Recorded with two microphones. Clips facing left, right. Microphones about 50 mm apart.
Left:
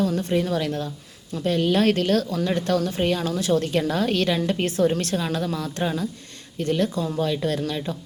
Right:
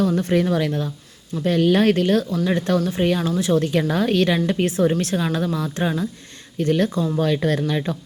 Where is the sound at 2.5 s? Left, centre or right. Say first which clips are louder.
Right 2 dB; right.